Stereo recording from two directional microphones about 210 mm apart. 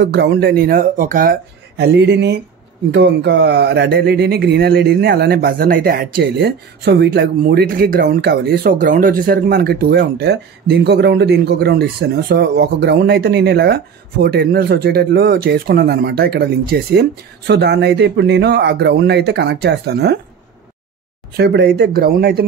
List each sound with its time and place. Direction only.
0.0 s a man's voice: 50° right (ahead or behind)
21.4 s a man's voice: 55° right (ahead or behind)